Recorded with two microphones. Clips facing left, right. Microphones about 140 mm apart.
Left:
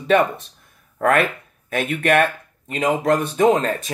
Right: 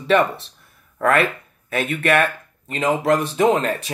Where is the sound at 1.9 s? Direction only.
40° left (ahead or behind).